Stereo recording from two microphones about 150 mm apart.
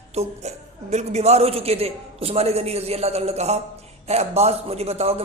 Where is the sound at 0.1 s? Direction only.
45° right (ahead or behind).